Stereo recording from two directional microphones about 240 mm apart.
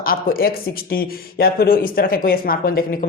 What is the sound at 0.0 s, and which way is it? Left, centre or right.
Speech, left.